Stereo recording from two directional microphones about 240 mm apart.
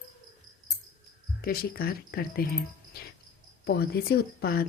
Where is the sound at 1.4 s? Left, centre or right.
Left.